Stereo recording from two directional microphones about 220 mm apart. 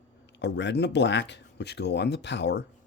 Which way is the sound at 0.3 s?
50° left (ahead or behind).